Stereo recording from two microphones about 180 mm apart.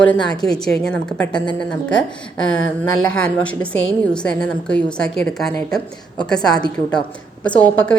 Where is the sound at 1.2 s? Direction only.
25° left (ahead or behind).